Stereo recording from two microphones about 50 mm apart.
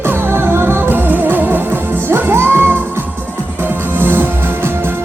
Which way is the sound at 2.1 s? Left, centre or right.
Right.